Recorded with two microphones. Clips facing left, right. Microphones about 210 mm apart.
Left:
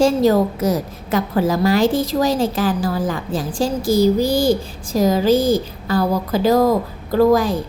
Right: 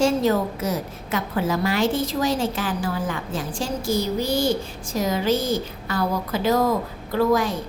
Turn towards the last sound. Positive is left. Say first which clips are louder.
# left 6 dB
turn(degrees=35)  # may be behind; listen again after turning